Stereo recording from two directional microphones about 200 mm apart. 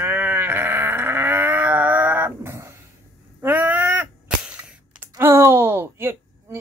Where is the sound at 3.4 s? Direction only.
10° right (ahead or behind).